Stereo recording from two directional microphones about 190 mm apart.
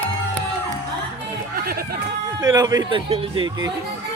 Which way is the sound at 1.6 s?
50° right (ahead or behind).